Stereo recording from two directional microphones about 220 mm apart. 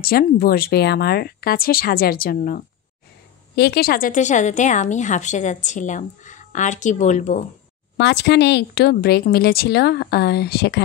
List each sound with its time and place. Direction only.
0.0 s a woman's voice: 45° left (ahead or behind)
8.0 s a woman's voice: 50° left (ahead or behind)